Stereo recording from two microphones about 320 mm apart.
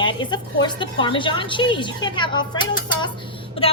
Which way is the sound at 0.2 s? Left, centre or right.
Centre.